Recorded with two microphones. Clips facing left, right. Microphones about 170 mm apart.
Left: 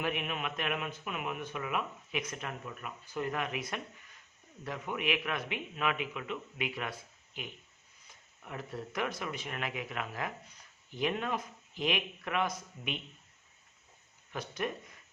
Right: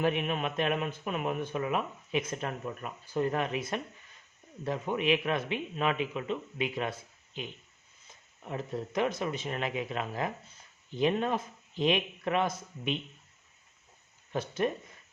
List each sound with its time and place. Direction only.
0.0 s a man's voice: 35° right (ahead or behind)
8.0 s speech: 25° right (ahead or behind)
14.3 s a man's voice: 25° right (ahead or behind)